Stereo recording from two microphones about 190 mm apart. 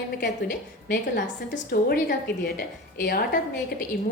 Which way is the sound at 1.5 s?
50° left (ahead or behind).